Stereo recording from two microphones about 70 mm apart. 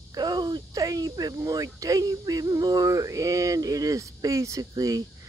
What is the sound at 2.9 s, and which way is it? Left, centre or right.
Speech, right.